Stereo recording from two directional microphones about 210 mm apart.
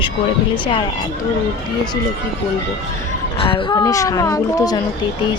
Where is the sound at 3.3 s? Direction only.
25° left (ahead or behind).